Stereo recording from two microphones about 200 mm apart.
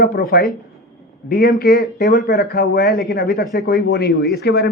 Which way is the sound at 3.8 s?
50° left (ahead or behind).